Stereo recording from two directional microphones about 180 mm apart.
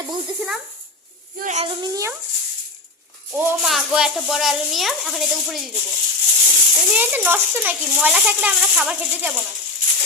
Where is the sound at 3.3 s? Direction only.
10° right (ahead or behind).